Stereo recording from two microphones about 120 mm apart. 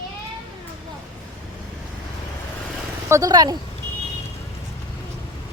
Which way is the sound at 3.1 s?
30° right (ahead or behind).